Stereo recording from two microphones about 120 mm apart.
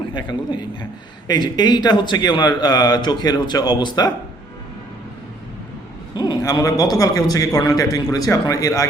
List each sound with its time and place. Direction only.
0.1 s a man's voice: 40° left (ahead or behind)
6.1 s a man's voice: 35° left (ahead or behind)